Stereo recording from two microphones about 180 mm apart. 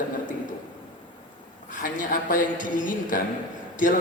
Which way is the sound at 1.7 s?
50° left (ahead or behind).